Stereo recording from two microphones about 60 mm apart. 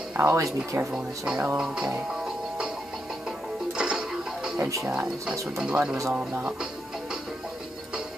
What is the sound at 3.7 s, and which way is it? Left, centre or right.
Music, centre.